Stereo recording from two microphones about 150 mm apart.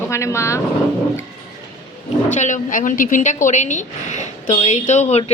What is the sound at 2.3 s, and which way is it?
A woman's voice, 55° left (ahead or behind).